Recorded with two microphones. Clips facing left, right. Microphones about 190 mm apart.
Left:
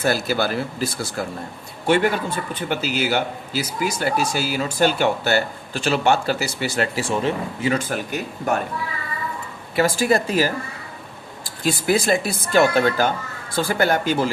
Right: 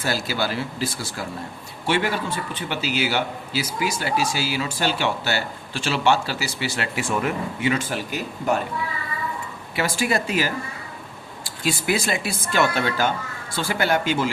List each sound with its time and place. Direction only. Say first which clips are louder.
0.0 s speech: left 4 dB; 50° left (ahead or behind); by 7.7 s 30° left (ahead or behind)
7.7 s speech: left 3 dB; 50° left (ahead or behind)
9.7 s speech: left 5 dB; 40° left (ahead or behind)
11.6 s speech: left 4 dB; 45° left (ahead or behind)